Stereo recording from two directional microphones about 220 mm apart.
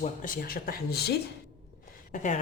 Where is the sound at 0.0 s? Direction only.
35° left (ahead or behind).